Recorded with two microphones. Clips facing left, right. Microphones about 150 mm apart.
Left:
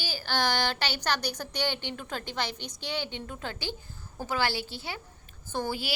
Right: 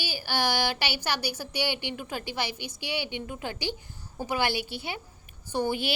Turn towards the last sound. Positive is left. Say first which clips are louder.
# right 4 dB
turn(degrees=-20)  # may be behind; listen again after turning